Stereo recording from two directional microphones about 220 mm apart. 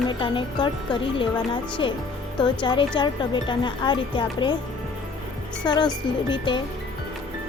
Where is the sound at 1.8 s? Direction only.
20° left (ahead or behind).